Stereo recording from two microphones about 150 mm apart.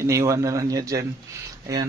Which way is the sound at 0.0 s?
20° right (ahead or behind).